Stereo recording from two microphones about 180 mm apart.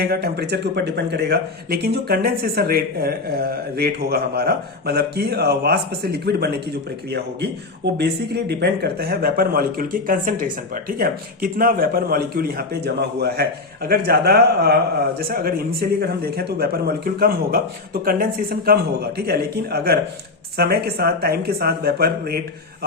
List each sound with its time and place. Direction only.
0.0 s speech: 60° right (ahead or behind)
7.9 s speech: 70° right (ahead or behind)